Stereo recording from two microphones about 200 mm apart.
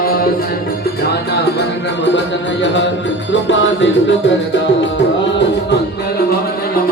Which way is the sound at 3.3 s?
65° left (ahead or behind).